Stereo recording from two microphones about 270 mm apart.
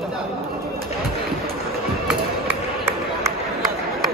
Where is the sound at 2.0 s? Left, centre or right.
Centre.